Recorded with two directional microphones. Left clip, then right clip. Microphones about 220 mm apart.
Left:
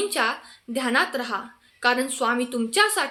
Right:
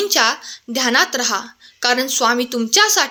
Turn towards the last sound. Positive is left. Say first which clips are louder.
# right 7 dB
turn(degrees=-40)  # may be behind; listen again after turning